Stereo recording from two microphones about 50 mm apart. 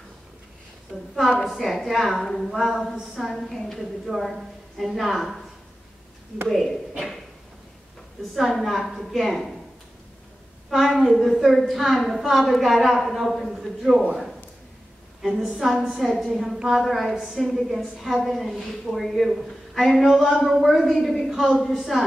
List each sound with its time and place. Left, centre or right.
0.9 s a woman's voice: centre
6.5 s a woman's voice: centre
8.4 s a woman's voice: centre
10.7 s a woman's voice: centre
15.2 s a woman's voice: centre
16.5 s a woman's voice: centre